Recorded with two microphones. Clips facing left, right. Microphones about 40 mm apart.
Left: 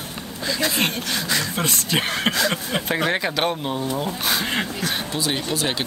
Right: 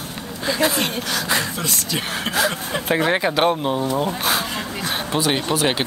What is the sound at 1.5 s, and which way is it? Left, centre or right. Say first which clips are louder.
Speech: left 2 dB; left.